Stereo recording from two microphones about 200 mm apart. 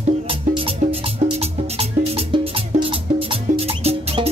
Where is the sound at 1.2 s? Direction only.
30° right (ahead or behind).